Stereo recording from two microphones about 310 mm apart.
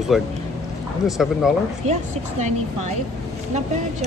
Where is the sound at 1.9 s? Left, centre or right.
Right.